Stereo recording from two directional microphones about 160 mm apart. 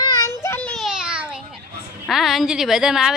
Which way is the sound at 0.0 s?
20° left (ahead or behind).